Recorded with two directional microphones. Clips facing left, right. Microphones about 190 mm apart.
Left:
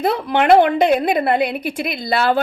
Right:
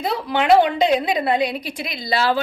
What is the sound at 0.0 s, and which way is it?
A woman's voice, 55° left (ahead or behind).